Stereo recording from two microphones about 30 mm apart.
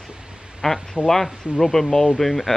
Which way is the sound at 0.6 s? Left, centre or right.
Centre.